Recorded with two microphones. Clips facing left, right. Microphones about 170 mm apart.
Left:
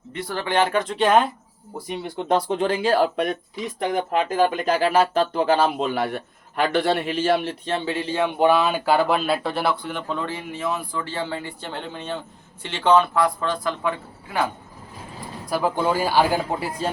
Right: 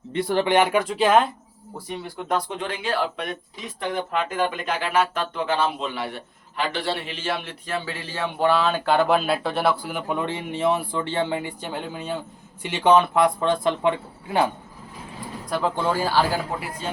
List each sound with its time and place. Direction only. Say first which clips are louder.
0.1 s speech: right 5 dB; 25° right (ahead or behind); by 1.3 s centre (ahead or behind)
1.9 s speech: left 4 dB; 25° left (ahead or behind); by 7.5 s 40° left (ahead or behind)
7.6 s speech: left 5 dB; 25° left (ahead or behind); by 9.7 s centre (ahead or behind)
9.8 s speech: right 1 dB; 10° right (ahead or behind); by 14.5 s 30° right (ahead or behind)
15.4 s speech: left 2 dB; 5° left (ahead or behind)
16.8 s speech: left 5 dB; 40° left (ahead or behind)